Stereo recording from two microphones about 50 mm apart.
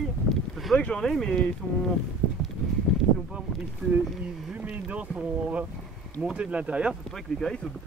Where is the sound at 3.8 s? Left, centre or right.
Right.